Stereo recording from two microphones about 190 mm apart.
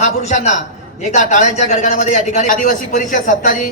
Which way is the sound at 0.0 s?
35° left (ahead or behind).